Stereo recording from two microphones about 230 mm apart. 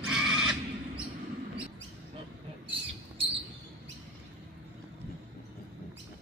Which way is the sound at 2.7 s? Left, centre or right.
Right.